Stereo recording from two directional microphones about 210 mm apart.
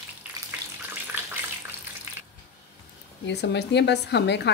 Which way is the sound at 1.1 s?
10° right (ahead or behind).